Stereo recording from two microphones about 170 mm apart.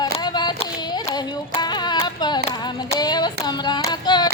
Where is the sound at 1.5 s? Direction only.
25° left (ahead or behind).